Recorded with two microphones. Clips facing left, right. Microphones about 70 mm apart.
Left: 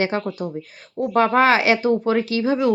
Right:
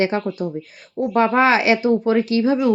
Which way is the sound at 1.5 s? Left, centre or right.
Left.